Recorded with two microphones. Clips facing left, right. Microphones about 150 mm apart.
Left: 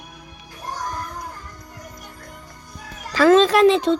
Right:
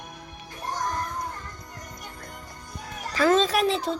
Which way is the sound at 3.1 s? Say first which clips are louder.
Left 7 dB; 90° left.